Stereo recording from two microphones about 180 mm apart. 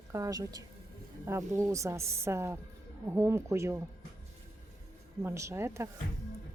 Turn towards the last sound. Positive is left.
turn(degrees=-15)  # may be behind; listen again after turning